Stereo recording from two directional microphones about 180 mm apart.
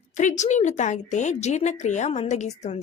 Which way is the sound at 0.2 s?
40° left (ahead or behind).